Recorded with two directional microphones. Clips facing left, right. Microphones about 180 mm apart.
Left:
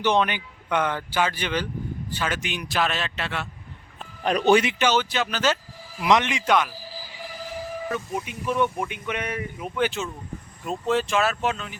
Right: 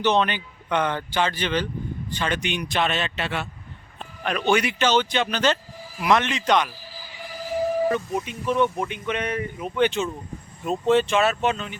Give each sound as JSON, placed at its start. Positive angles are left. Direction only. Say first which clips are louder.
{"t": 0.0, "sound": "speech", "louder": "right 1 dB", "side_deg": 10}
{"t": 4.2, "sound": "speech", "louder": "left 3 dB", "side_deg": 35}
{"t": 4.6, "sound": "speech", "louder": "right 1 dB", "side_deg": 15}
{"t": 6.1, "sound": "speech", "louder": "even", "side_deg": 15}
{"t": 8.3, "sound": "speech", "louder": "right 2 dB", "side_deg": 10}